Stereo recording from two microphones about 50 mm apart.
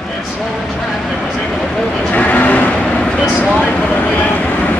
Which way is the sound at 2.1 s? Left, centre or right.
Left.